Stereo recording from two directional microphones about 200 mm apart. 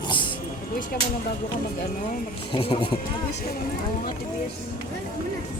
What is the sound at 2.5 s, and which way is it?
Speech, 25° left (ahead or behind).